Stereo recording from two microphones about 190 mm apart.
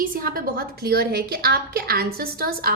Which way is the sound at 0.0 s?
50° right (ahead or behind).